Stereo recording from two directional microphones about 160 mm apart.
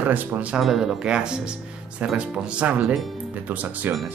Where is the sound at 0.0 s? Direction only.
10° right (ahead or behind).